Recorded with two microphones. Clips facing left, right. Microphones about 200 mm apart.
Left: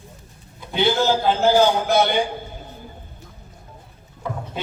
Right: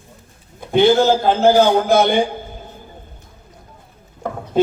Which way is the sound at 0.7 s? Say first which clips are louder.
Right 7 dB; 50° right (ahead or behind).